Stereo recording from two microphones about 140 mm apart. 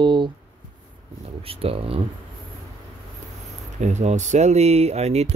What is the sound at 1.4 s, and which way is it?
Speech, 40° right (ahead or behind).